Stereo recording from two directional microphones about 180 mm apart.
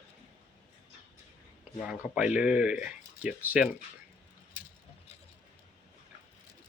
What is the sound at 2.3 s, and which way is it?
Speech, 5° right (ahead or behind).